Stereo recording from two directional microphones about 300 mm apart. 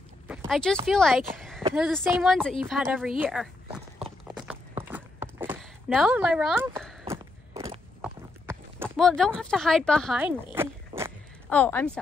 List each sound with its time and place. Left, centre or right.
0.3 s a sound: centre
0.7 s a woman's voice: centre
1.3 s a sound: centre
1.6 s a sound: centre
1.9 s a woman's voice: centre
4.3 s clip-clop: centre
7.5 s walk: centre
8.0 s clip-clop: centre
8.8 s speech: centre
11.4 s a woman's voice: centre